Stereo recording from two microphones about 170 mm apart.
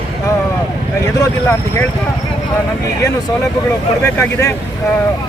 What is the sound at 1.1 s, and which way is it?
Speech, 15° left (ahead or behind).